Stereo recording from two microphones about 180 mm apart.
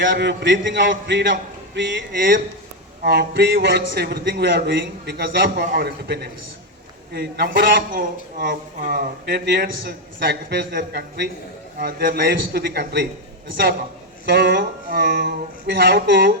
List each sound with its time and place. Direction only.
0.0 s a man's voice: 85° right
2.1 s a man's voice: 55° right (ahead or behind)
14.3 s speech: 65° right (ahead or behind)